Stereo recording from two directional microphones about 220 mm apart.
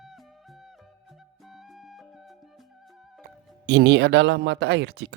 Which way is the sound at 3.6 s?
50° right (ahead or behind).